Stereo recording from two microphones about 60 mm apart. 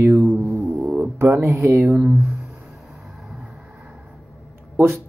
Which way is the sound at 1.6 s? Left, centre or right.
Right.